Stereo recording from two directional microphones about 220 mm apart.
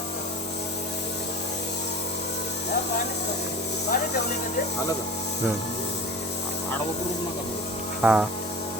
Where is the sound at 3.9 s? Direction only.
40° left (ahead or behind).